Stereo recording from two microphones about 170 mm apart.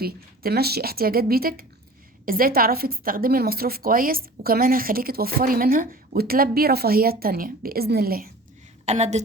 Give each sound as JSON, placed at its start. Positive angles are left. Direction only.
{"t": 0.0, "sound": "a woman's voice", "side_deg": -65}
{"t": 8.9, "sound": "a woman's voice", "side_deg": -40}